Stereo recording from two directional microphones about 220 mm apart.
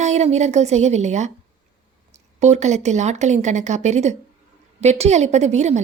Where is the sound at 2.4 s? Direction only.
30° right (ahead or behind).